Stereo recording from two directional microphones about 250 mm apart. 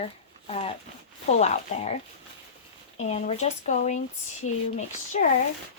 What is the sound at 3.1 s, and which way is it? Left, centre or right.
Speech, left.